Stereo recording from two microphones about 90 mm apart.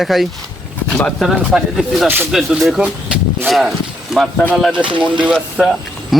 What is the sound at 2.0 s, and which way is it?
Speech, 25° right (ahead or behind).